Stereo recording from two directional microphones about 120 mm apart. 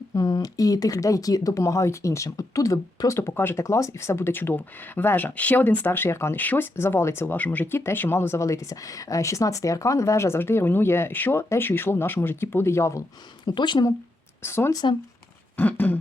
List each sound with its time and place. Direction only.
0.1 s speech: 30° left (ahead or behind)
13.4 s speech: 40° left (ahead or behind)
14.4 s speech: 20° left (ahead or behind)
15.5 s a sound: 15° left (ahead or behind)